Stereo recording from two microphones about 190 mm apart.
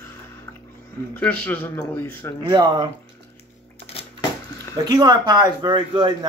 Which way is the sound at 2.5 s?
20° right (ahead or behind).